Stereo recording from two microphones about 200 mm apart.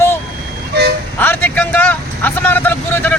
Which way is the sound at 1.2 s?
10° left (ahead or behind).